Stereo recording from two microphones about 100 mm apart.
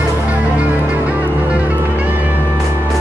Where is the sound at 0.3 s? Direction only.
15° right (ahead or behind).